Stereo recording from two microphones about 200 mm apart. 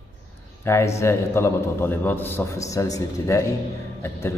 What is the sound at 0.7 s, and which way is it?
A man's voice, 15° left (ahead or behind).